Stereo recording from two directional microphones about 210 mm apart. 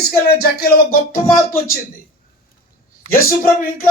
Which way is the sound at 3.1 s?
45° left (ahead or behind).